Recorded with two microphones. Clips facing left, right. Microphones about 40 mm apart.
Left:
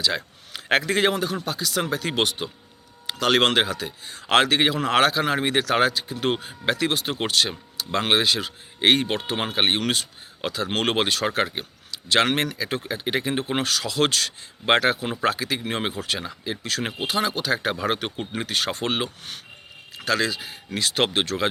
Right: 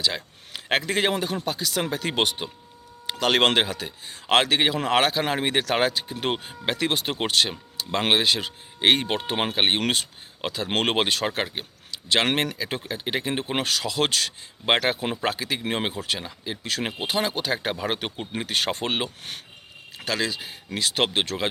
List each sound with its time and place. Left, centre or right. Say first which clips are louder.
0.5 s a man's voice: left 3 dB; centre
1.1 s speech: even; centre
5.5 s speech: left 2 dB; right
9.8 s speech: even; right
11.2 s speech: left 2 dB; centre
11.9 s a man's voice: left 2 dB; centre
12.9 s speech: left 2 dB; centre
13.4 s speech: left 1 dB; centre
16.2 s speech: left 3 dB; centre
16.6 s speech: even; centre
17.7 s speech: left 2 dB; centre
18.4 s speech: right 1 dB; right
18.8 s speech: left 1 dB; centre